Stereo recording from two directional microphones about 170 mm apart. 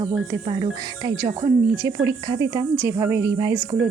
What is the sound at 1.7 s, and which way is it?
Speech, 25° left (ahead or behind).